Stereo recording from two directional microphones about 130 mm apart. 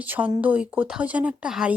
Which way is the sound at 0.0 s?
10° right (ahead or behind).